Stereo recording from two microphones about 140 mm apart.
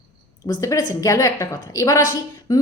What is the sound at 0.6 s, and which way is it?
A woman's voice, 25° left (ahead or behind).